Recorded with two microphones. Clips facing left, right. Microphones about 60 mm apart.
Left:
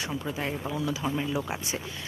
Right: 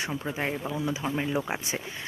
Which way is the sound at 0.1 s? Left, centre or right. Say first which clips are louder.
Right 1 dB; right.